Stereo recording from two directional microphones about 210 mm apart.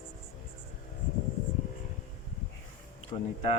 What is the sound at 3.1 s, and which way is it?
Speech, 25° left (ahead or behind).